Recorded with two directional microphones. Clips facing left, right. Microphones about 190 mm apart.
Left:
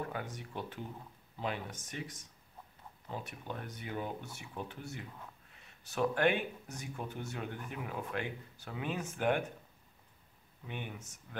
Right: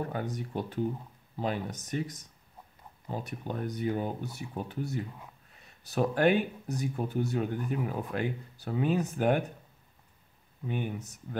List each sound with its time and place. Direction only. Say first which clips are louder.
0.0 s speech: right 6 dB; 40° right (ahead or behind)
10.7 s speech: right 9 dB; 40° right (ahead or behind)